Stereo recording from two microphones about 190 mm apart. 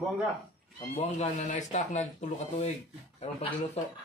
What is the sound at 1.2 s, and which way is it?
Speech, 35° left (ahead or behind).